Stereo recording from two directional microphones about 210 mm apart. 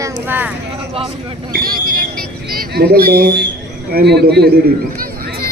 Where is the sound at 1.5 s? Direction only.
45° right (ahead or behind).